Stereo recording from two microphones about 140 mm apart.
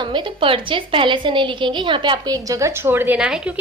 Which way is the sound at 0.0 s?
35° right (ahead or behind).